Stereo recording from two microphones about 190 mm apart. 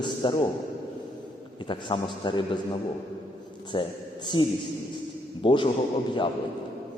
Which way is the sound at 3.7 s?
25° left (ahead or behind).